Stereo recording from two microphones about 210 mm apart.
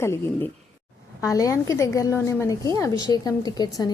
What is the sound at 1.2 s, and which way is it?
A woman's voice, 15° left (ahead or behind).